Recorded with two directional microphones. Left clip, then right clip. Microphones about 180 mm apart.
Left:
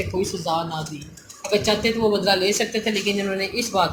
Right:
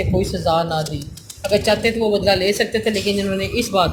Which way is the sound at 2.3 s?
40° right (ahead or behind).